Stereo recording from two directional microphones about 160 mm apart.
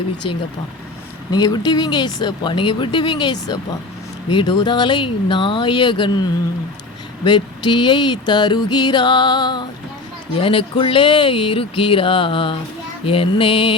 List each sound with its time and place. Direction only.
1.3 s speech: 25° left (ahead or behind)
7.3 s speech: 30° left (ahead or behind)
10.3 s a sound: 35° left (ahead or behind)